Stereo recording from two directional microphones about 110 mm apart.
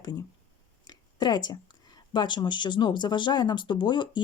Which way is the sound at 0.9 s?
40° left (ahead or behind).